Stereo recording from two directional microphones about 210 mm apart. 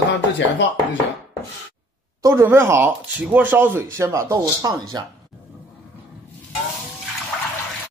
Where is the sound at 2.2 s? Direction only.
10° right (ahead or behind).